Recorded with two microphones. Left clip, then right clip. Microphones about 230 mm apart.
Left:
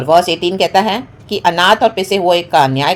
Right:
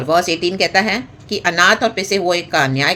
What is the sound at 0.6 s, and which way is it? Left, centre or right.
Speech, left.